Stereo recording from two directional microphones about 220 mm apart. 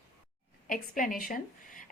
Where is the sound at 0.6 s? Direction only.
40° left (ahead or behind).